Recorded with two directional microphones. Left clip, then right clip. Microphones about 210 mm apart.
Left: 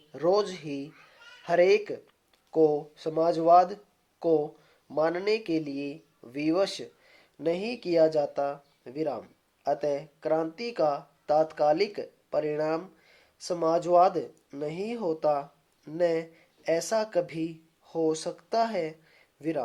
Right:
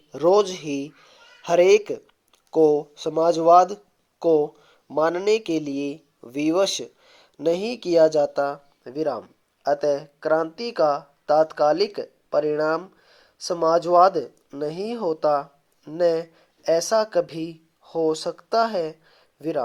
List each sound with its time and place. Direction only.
0.1 s speech: 30° right (ahead or behind)